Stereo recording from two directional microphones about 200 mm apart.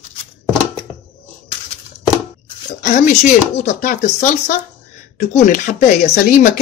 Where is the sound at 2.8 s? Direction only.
40° left (ahead or behind).